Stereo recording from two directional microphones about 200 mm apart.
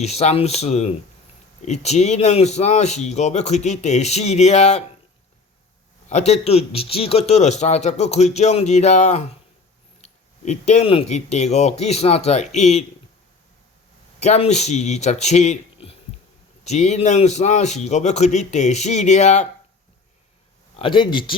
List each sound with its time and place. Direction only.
0.0 s speech: 35° left (ahead or behind)
6.1 s speech: 35° left (ahead or behind)
10.4 s speech: 35° left (ahead or behind)
14.2 s a man's voice: 35° left (ahead or behind)
20.7 s speech: 25° left (ahead or behind)